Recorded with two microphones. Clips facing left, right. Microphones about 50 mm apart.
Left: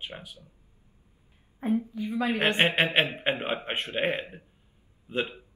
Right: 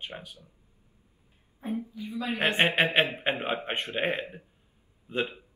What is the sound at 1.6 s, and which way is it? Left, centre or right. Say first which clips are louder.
Speech: left 6 dB; left.